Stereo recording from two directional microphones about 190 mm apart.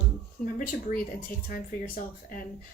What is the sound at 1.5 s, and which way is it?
Speech, 45° left (ahead or behind).